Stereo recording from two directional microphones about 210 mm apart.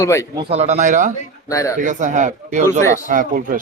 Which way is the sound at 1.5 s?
15° left (ahead or behind).